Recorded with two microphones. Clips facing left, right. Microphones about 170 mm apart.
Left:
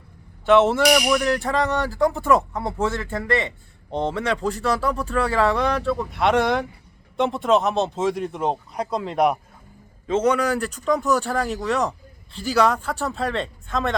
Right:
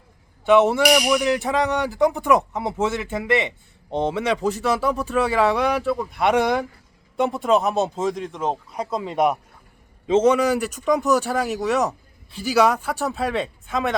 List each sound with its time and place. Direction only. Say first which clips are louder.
0.4 s speech: even; centre (ahead or behind); by 5.5 s 20° right (ahead or behind)
5.5 s speech: right 1 dB; 5° right (ahead or behind)
10.1 s speech: right 3 dB; 25° right (ahead or behind); by 13.9 s 5° right (ahead or behind)